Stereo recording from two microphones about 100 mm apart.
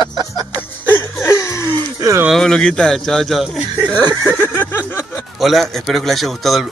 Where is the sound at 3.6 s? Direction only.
20° right (ahead or behind).